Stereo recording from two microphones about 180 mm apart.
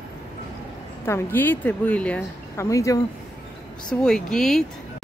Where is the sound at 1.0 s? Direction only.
10° left (ahead or behind).